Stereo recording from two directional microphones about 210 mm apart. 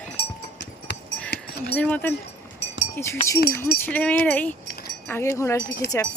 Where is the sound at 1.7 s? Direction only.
10° left (ahead or behind).